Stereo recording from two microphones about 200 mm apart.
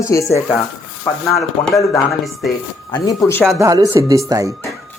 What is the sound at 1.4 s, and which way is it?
Speech, centre (ahead or behind).